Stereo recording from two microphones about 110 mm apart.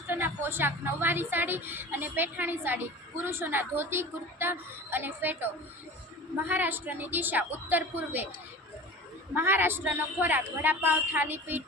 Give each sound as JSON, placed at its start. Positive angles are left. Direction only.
{"t": 0.1, "sound": "a woman's voice", "side_deg": -20}
{"t": 6.5, "sound": "a man's voice", "side_deg": -15}
{"t": 9.3, "sound": "a man's voice", "side_deg": -20}